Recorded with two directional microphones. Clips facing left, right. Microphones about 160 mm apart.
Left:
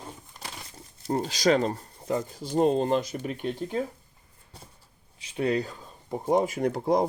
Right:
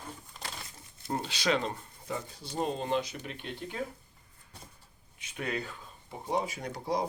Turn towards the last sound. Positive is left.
turn(degrees=50)  # may be behind; listen again after turning